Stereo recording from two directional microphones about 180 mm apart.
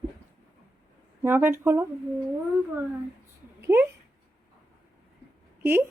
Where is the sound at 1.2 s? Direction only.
10° right (ahead or behind).